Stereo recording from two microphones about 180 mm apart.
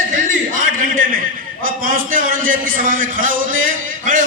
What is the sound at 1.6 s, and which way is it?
A man's voice, 50° right (ahead or behind).